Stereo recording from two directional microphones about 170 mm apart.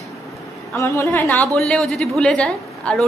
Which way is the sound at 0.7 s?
15° left (ahead or behind).